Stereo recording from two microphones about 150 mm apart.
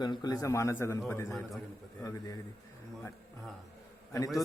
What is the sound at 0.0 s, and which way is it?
A man's voice, 30° left (ahead or behind).